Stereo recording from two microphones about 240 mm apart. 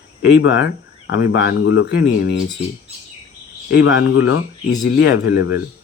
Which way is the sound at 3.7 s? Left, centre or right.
Left.